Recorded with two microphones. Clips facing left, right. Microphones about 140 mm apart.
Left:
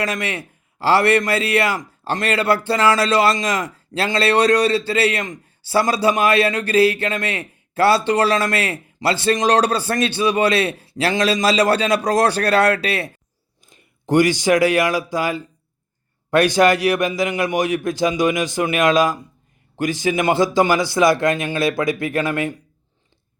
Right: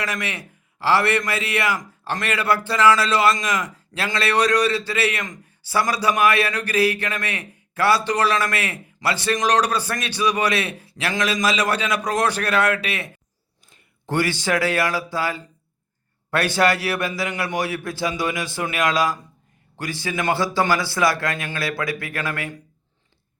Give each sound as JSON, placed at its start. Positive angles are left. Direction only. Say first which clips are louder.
{"t": 0.0, "sound": "a man's voice", "louder": "left 4 dB", "side_deg": 25}
{"t": 13.7, "sound": "a man's voice", "louder": "left 8 dB", "side_deg": 15}